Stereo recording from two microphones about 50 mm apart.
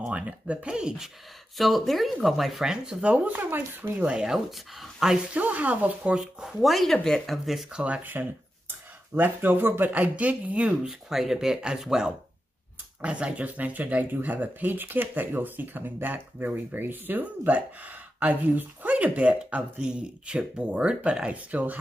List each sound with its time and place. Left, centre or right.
0.1 s speech: right
1.6 s speech: centre
3.1 s speech: right
3.9 s speech: right
4.3 s speech: centre
5.3 s speech: right
6.4 s speech: centre
7.7 s speech: right
8.0 s speech: right
10.7 s speech: centre
13.6 s speech: right
17.5 s speech: right
19.8 s speech: centre